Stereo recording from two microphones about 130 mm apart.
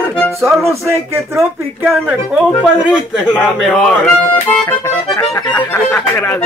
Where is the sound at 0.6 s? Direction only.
20° right (ahead or behind).